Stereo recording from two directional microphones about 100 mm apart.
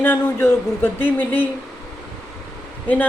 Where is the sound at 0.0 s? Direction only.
20° left (ahead or behind).